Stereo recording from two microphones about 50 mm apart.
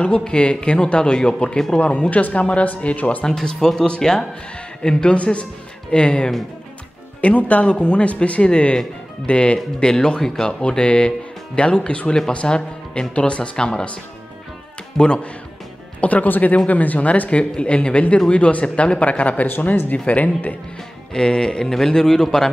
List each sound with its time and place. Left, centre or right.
0.0 s speech: centre
3.3 s speech: centre; by 7.6 s left
7.6 s speech: centre
15.0 s speech: centre
16.0 s speech: left
19.4 s speech: left
21.1 s speech: centre